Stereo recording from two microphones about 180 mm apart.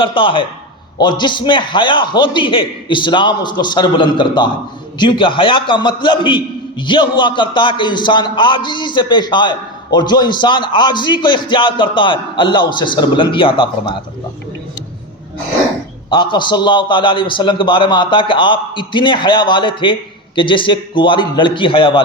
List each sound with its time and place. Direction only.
0.0 s a man's voice: 30° left (ahead or behind)
16.0 s a man's voice: 25° left (ahead or behind)